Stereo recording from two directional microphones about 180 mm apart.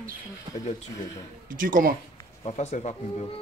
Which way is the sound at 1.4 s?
50° right (ahead or behind).